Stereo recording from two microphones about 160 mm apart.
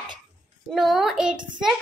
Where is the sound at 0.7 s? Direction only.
Centre (ahead or behind).